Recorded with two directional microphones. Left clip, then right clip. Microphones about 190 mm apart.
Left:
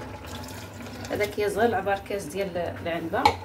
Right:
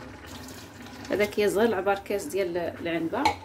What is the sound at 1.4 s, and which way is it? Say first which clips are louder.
Speech: left 1 dB; 55° right (ahead or behind).